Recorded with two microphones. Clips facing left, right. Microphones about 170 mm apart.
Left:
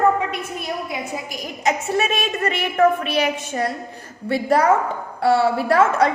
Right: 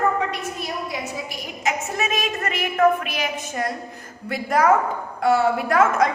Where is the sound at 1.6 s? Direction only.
30° left (ahead or behind).